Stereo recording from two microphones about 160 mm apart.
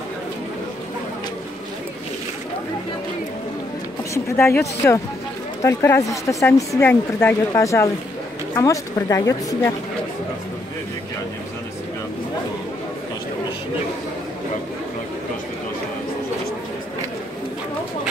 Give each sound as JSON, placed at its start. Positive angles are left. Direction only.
{"t": 4.1, "sound": "a woman's voice", "side_deg": 15}